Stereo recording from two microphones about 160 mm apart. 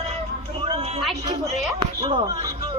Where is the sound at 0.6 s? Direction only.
35° right (ahead or behind).